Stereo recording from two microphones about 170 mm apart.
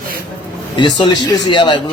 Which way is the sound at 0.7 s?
25° left (ahead or behind).